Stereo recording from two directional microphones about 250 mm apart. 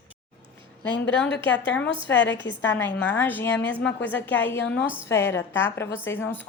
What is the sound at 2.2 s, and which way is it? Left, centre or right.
Speech, left.